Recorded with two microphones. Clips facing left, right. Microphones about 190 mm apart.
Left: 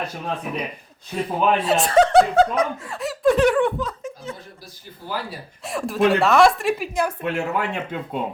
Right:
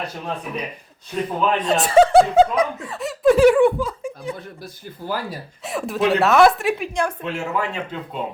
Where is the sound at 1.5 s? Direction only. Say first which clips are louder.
Even; 5° left (ahead or behind).